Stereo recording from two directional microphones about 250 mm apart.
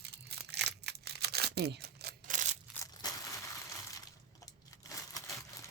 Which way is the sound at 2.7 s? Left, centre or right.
Centre.